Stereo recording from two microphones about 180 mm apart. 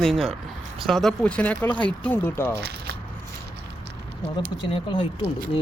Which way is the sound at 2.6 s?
65° right (ahead or behind).